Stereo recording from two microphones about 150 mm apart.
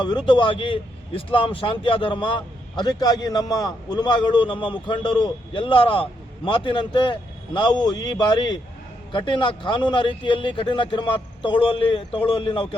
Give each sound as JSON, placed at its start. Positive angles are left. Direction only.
{"t": 0.3, "sound": "a man's voice", "side_deg": 35}